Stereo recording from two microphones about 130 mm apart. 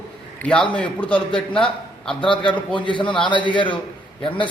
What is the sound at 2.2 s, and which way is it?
A man's voice, 40° left (ahead or behind).